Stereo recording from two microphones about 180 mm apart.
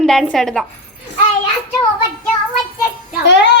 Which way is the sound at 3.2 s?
75° left (ahead or behind).